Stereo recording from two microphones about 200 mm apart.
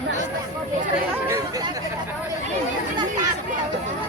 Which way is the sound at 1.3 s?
20° right (ahead or behind).